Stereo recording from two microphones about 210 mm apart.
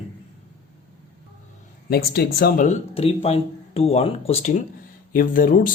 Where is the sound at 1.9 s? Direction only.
45° left (ahead or behind).